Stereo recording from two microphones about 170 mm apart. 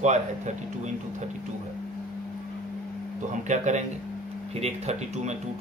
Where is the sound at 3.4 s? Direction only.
45° right (ahead or behind).